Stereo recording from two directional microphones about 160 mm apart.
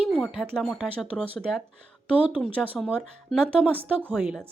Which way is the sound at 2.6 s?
5° left (ahead or behind).